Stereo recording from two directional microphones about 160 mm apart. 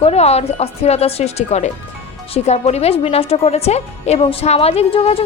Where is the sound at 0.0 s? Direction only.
40° left (ahead or behind).